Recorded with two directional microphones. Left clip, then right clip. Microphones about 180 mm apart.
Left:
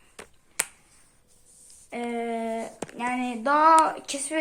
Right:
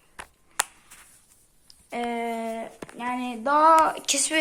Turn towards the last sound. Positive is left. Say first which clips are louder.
# right 5 dB
turn(degrees=0)  # may be behind; listen again after turning